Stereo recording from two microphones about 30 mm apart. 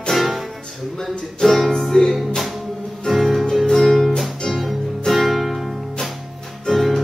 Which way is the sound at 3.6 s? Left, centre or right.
Centre.